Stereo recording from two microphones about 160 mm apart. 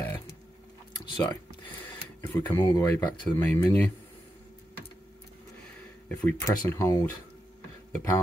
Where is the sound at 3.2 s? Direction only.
10° left (ahead or behind).